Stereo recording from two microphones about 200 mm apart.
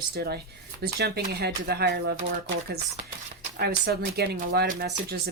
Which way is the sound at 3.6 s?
55° right (ahead or behind).